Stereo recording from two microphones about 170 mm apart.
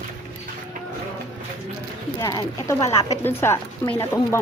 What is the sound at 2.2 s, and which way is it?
A woman's voice, 20° left (ahead or behind).